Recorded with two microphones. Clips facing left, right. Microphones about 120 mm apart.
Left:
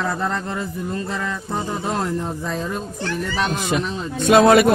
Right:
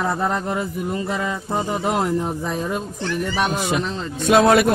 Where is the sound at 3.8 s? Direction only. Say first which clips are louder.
Left 2 dB; 5° left (ahead or behind).